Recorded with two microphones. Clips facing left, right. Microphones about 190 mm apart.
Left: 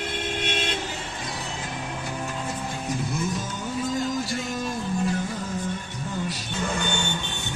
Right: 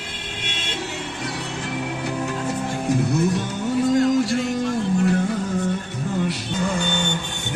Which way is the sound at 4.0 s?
70° right (ahead or behind).